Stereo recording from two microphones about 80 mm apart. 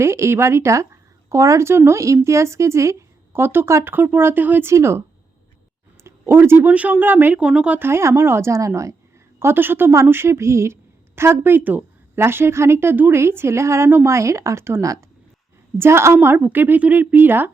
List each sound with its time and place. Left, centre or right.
0.0 s a woman's voice: right
4.7 s a woman's voice: right
6.0 s a sound: right
6.7 s speech: centre
7.3 s speech: centre
7.8 s a woman's voice: right
9.4 s a woman's voice: right
15.8 s a woman's voice: right